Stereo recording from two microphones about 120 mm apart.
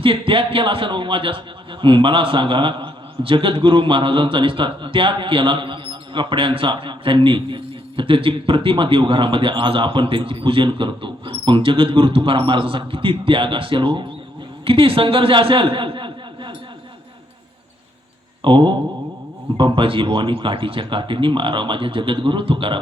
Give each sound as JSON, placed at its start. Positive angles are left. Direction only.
{"t": 0.0, "sound": "a man's voice", "side_deg": -45}
{"t": 18.4, "sound": "a man's voice", "side_deg": -40}